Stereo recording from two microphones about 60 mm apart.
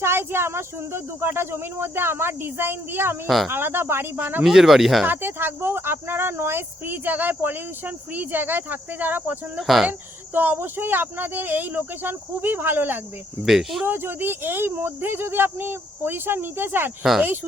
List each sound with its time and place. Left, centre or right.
0.0 s speech: right
3.2 s speech: centre
3.5 s speech: right
4.4 s speech: centre
5.0 s speech: right
9.6 s speech: centre
10.3 s speech: right
13.4 s speech: centre
13.8 s speech: right